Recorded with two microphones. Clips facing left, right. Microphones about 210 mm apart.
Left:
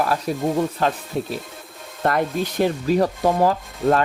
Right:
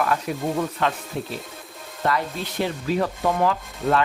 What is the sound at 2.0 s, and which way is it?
Rub, 50° left (ahead or behind).